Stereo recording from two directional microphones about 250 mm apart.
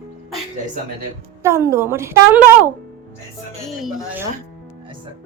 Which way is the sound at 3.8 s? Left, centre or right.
Centre.